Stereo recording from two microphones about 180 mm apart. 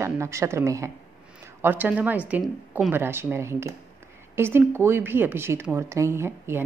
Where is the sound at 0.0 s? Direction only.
15° right (ahead or behind).